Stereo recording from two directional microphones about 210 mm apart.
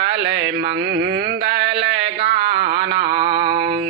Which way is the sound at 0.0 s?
50° right (ahead or behind).